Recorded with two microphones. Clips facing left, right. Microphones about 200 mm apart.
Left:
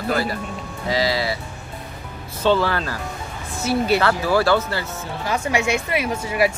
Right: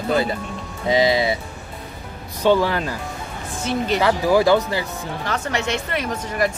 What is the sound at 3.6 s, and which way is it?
Speech, 10° left (ahead or behind).